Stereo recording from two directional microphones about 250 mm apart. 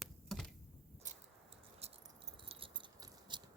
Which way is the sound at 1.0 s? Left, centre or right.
Right.